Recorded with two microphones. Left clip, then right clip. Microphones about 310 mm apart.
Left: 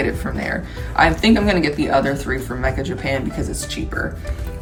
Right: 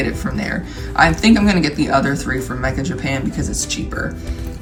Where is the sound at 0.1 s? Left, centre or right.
Centre.